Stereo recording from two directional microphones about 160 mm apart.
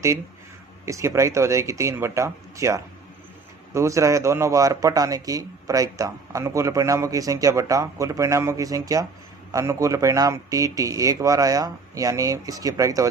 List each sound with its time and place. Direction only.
0.9 s a man's voice: 20° right (ahead or behind)